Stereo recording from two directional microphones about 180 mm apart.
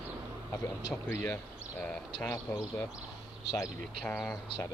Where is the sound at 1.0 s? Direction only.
10° left (ahead or behind).